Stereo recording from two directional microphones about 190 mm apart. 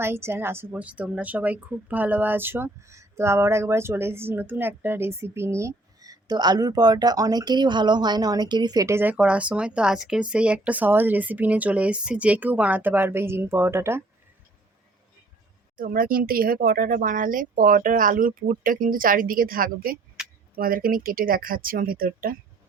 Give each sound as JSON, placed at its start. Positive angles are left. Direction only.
{"t": 0.0, "sound": "a woman's voice", "side_deg": -15}
{"t": 15.8, "sound": "speech", "side_deg": -50}
{"t": 20.2, "sound": "a sound", "side_deg": -5}
{"t": 20.6, "sound": "speech", "side_deg": -50}